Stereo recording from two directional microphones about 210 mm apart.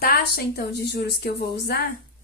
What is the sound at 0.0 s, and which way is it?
Speech, 45° left (ahead or behind).